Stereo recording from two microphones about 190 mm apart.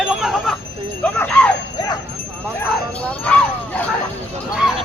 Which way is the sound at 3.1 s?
5° left (ahead or behind).